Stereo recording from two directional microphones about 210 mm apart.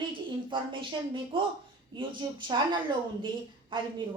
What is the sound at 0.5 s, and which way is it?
A woman's voice, 25° right (ahead or behind).